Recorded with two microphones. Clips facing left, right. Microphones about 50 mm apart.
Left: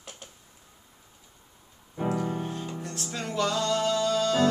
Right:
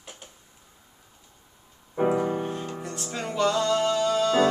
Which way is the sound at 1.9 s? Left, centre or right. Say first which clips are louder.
Right 5 dB; centre.